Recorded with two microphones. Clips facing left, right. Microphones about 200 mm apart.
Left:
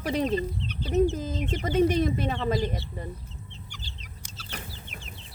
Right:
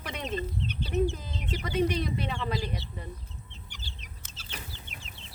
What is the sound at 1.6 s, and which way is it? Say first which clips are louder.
Speech: left 5 dB; 45° left (ahead or behind).